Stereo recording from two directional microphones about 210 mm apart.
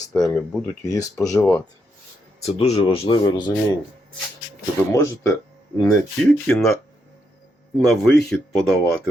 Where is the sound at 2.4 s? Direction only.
30° left (ahead or behind).